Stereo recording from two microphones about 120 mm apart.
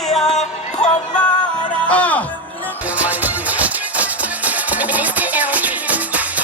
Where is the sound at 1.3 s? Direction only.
40° left (ahead or behind).